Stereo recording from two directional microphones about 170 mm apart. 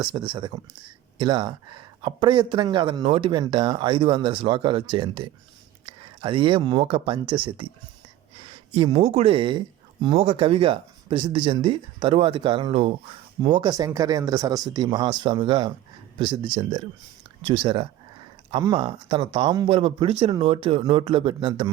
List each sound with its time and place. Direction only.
0.0 s speech: 30° right (ahead or behind)